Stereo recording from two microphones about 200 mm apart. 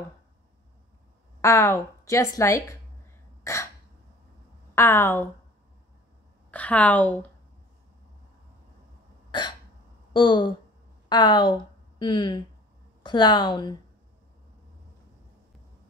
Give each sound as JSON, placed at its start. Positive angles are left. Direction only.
{"t": 1.4, "sound": "a woman's voice", "side_deg": 15}
{"t": 4.7, "sound": "a woman's voice", "side_deg": 10}
{"t": 6.5, "sound": "a woman's voice", "side_deg": 5}
{"t": 10.1, "sound": "a woman's voice", "side_deg": 25}